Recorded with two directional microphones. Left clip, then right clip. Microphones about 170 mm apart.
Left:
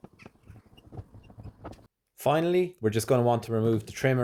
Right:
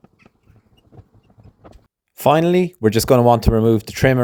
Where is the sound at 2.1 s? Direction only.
55° right (ahead or behind).